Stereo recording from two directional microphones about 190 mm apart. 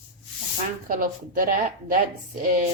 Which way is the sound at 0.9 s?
45° right (ahead or behind).